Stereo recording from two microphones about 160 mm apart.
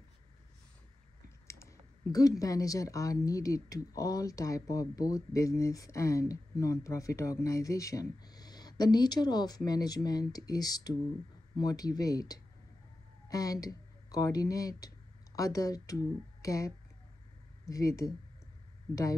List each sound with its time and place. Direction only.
1.5 s speech: 20° left (ahead or behind)